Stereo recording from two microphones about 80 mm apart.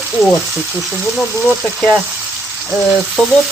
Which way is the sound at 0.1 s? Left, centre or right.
Centre.